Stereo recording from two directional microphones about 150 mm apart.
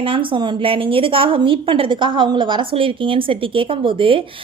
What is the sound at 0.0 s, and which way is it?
A woman's voice, 35° right (ahead or behind).